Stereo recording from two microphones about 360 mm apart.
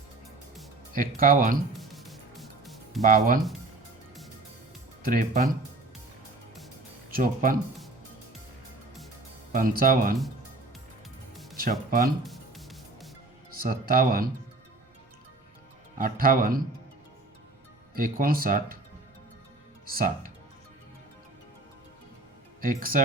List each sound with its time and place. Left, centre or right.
0.9 s speech: right
1.7 s music: centre
3.1 s speech: right
5.0 s speech: right
7.1 s speech: right
9.5 s speech: right
11.5 s speech: right
12.2 s music: centre
13.5 s speech: right
16.0 s speech: right
17.9 s speech: right
19.8 s music: right
22.6 s speech: right